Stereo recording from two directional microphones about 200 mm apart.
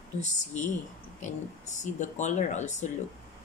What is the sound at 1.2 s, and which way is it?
Speech, 35° left (ahead or behind).